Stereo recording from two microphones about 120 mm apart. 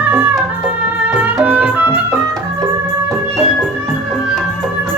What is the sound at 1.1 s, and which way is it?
Music, 15° right (ahead or behind).